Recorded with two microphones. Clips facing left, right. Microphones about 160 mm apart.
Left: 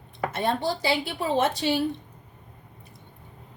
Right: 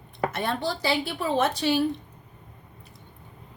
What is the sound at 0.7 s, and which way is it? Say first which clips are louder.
A woman's voice: left 1 dB; 20° left (ahead or behind).